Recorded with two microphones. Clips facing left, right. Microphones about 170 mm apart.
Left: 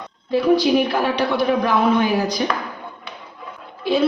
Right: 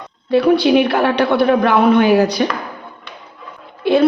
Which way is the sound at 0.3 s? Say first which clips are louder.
Right 4 dB; 70° right (ahead or behind).